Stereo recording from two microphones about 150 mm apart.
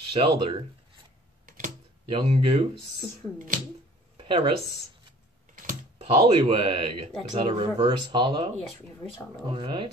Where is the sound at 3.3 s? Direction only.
65° right (ahead or behind).